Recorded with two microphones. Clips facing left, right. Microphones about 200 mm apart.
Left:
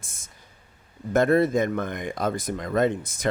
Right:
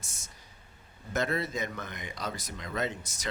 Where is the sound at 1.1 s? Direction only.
50° left (ahead or behind).